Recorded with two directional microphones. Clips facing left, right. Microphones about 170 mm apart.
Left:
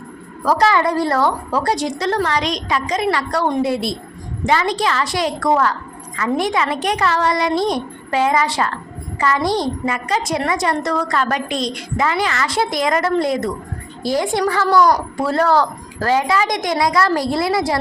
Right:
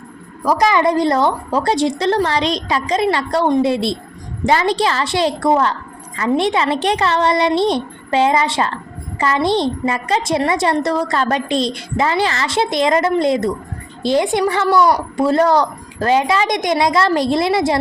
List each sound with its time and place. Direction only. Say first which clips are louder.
0.4 s a woman's voice: right 1 dB; 15° right (ahead or behind)